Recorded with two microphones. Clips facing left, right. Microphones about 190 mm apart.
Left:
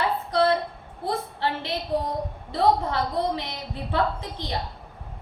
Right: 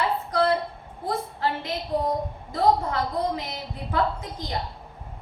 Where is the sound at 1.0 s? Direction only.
30° left (ahead or behind).